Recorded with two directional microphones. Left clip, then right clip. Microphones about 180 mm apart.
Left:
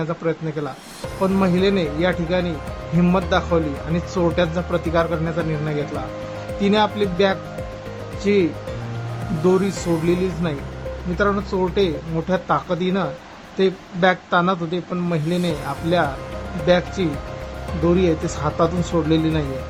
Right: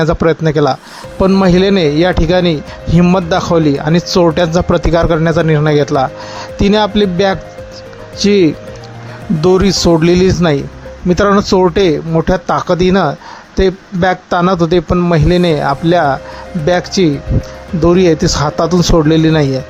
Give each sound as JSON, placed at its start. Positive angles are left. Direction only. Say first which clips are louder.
{"t": 0.0, "sound": "speech", "louder": "right 12 dB", "side_deg": -50}
{"t": 9.5, "sound": "speech", "louder": "right 10 dB", "side_deg": -50}